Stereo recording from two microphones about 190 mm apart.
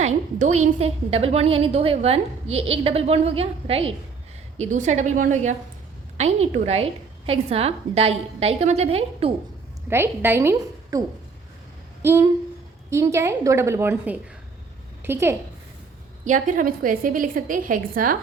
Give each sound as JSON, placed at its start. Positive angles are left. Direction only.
{"t": 0.0, "sound": "a woman's voice", "side_deg": -35}
{"t": 9.9, "sound": "a woman's voice", "side_deg": -10}
{"t": 12.0, "sound": "a woman's voice", "side_deg": -15}
{"t": 16.2, "sound": "a woman's voice", "side_deg": -45}